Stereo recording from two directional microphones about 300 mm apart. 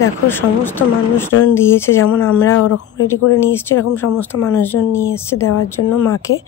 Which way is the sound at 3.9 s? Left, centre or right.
Centre.